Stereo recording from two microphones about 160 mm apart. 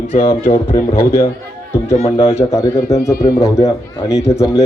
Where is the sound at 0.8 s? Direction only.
20° left (ahead or behind).